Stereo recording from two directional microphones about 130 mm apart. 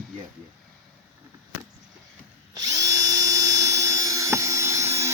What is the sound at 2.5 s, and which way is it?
Drill, 25° right (ahead or behind).